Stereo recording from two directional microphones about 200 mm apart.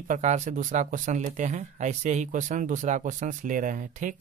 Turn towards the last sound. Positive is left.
turn(degrees=-40)  # may be behind; listen again after turning